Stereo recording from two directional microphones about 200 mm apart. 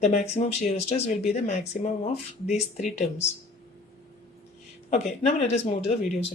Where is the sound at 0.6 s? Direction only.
30° left (ahead or behind).